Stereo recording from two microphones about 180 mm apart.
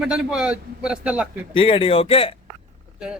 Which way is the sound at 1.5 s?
30° left (ahead or behind).